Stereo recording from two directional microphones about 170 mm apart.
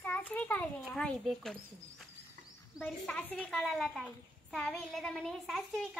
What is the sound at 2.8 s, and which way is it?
A child's voice, 10° left (ahead or behind).